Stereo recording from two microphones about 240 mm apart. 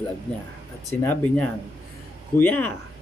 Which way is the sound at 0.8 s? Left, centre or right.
Centre.